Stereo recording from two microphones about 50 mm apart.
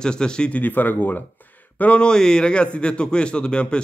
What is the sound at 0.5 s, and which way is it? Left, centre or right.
Speech, left.